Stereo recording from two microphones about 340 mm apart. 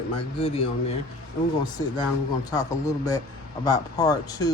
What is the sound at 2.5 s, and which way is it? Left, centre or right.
Speech, centre.